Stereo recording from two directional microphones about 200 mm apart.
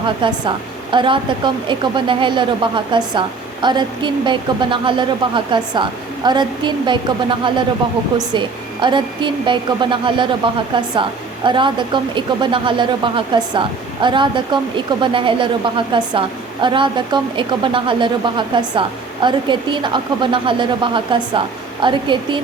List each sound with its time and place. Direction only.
0.2 s speech: 25° right (ahead or behind)